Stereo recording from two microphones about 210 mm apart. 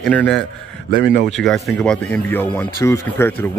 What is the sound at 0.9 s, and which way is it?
Speech, 55° right (ahead or behind).